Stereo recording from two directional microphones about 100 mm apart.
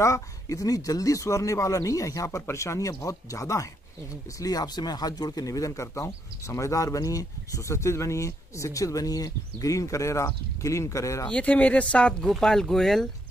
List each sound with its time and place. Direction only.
0.0 s speech: 30° left (ahead or behind)
11.2 s speech: 10° left (ahead or behind)